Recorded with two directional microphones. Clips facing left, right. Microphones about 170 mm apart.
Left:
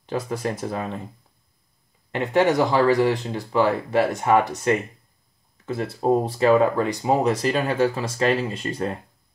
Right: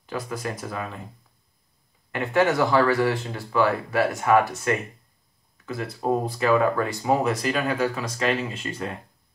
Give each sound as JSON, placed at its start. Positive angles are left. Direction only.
{"t": 0.1, "sound": "speech", "side_deg": 25}
{"t": 2.1, "sound": "speech", "side_deg": 20}